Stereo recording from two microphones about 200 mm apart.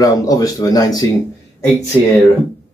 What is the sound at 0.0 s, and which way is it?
Speech, 15° left (ahead or behind).